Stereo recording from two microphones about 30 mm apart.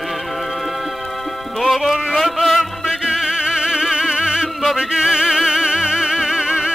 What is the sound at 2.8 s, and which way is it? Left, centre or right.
Music, centre.